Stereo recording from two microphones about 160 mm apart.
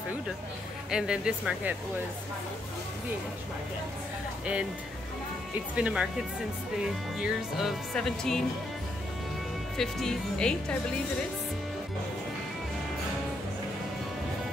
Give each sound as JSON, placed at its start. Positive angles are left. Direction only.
{"t": 0.8, "sound": "speech", "side_deg": -5}
{"t": 5.8, "sound": "speech", "side_deg": -5}
{"t": 9.8, "sound": "speech", "side_deg": 5}